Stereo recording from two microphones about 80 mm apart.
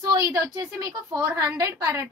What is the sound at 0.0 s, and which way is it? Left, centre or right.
A woman's voice, right.